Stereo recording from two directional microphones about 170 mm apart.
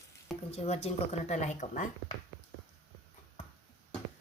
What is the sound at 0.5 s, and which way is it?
Speech, 35° left (ahead or behind).